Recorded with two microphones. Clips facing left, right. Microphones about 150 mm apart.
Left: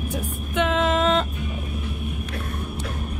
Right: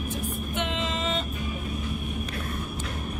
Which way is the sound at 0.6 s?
85° left.